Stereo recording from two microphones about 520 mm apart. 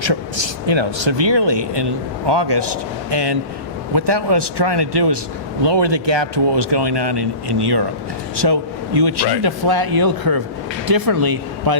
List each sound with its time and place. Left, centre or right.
0.0 s speech: right